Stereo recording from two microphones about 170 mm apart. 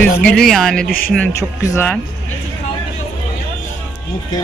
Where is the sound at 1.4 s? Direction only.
15° left (ahead or behind).